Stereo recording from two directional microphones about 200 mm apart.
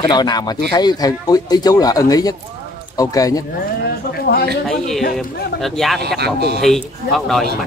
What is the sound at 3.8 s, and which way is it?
Speech, 50° left (ahead or behind).